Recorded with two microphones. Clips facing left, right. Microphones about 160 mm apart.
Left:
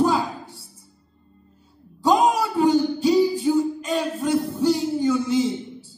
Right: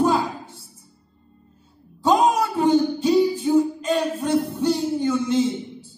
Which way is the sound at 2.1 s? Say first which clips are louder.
Even; centre (ahead or behind).